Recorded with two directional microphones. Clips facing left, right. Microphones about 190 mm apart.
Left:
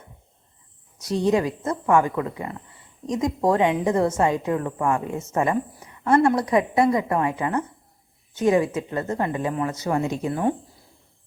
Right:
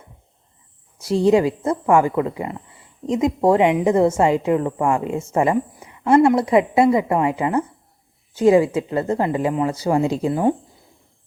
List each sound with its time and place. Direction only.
0.9 s a woman's voice: 30° right (ahead or behind)